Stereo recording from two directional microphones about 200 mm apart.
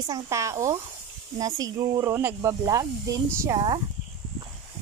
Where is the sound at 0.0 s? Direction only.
15° right (ahead or behind).